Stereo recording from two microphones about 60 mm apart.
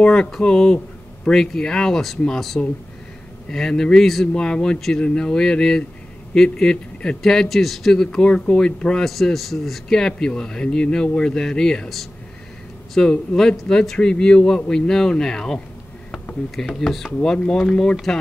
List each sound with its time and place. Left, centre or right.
0.0 s speech: centre
4.7 s speech: centre